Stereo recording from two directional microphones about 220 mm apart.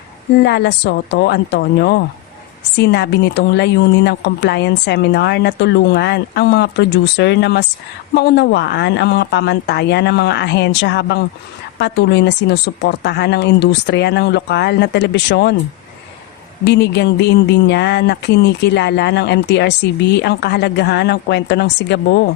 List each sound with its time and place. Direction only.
0.4 s speech: 50° left (ahead or behind)
16.6 s speech: 50° left (ahead or behind)